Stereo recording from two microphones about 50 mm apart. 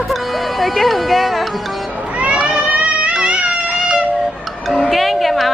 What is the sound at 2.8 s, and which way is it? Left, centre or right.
Music, right.